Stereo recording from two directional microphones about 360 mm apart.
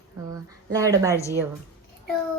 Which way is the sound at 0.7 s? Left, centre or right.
Centre.